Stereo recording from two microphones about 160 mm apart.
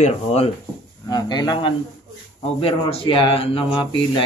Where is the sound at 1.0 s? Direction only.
25° left (ahead or behind).